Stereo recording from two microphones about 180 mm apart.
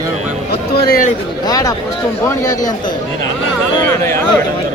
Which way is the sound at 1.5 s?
20° left (ahead or behind).